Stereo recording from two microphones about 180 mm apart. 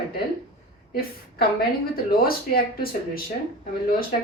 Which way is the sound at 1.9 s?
55° left (ahead or behind).